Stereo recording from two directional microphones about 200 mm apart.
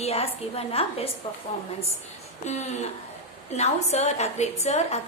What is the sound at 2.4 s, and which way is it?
A woman's voice, 35° left (ahead or behind).